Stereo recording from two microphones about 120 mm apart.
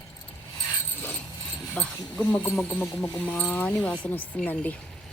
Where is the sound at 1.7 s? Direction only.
10° left (ahead or behind).